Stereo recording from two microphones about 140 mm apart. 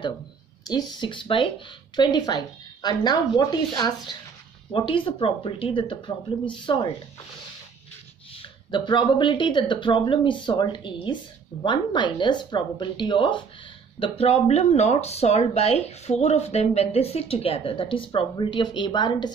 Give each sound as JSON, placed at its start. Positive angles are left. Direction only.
{"t": 0.7, "sound": "speech", "side_deg": 30}
{"t": 8.3, "sound": "speech", "side_deg": 35}